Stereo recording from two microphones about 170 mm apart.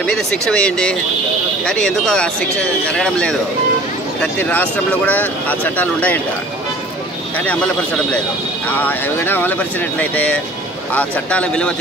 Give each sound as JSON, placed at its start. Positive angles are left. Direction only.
{"t": 0.0, "sound": "speech", "side_deg": 5}
{"t": 7.3, "sound": "speech", "side_deg": 10}